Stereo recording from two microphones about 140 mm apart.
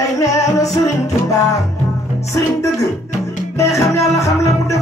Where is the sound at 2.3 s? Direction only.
20° left (ahead or behind).